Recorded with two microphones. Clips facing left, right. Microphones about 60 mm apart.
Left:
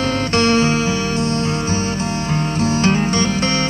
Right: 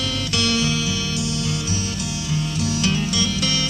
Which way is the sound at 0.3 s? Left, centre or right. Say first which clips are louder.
Left 7 dB; left.